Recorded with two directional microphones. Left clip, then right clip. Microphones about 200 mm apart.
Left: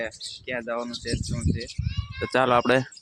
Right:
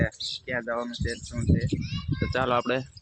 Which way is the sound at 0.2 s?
55° right (ahead or behind).